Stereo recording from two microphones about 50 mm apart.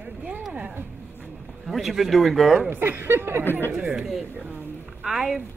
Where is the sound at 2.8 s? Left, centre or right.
Right.